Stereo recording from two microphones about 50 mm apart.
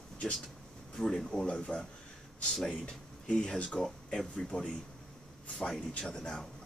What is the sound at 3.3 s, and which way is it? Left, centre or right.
Speech, centre.